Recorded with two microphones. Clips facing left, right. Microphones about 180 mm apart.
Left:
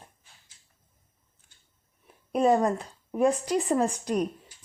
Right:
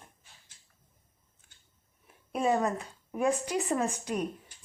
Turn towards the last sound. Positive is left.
turn(degrees=35)  # may be behind; listen again after turning